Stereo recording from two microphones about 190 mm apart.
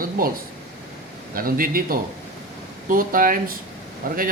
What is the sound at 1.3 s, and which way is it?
A man's voice, 50° right (ahead or behind).